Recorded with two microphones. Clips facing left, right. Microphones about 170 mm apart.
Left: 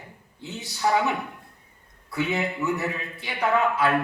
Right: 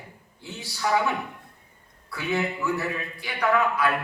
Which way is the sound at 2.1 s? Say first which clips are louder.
Left 1 dB; 20° left (ahead or behind).